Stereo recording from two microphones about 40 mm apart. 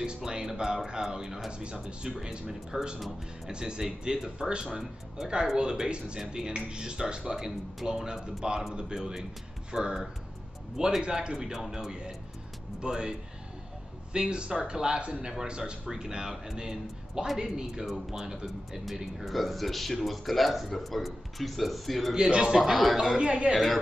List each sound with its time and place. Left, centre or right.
0.0 s speech: right
1.5 s speech: right
11.0 s speech: right
14.1 s a man's voice: right
17.8 s speech: centre
19.2 s speech: centre
22.1 s speech: centre
22.6 s speech: centre
23.1 s speech: right
23.5 s speech: centre